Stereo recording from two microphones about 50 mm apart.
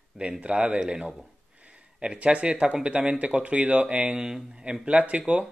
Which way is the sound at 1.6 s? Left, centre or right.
Right.